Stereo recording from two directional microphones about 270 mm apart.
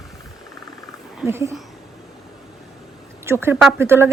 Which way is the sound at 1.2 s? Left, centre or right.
Centre.